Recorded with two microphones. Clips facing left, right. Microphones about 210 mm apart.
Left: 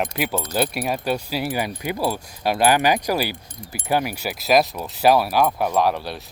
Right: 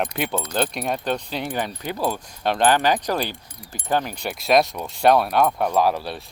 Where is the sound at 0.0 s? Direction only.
Centre (ahead or behind).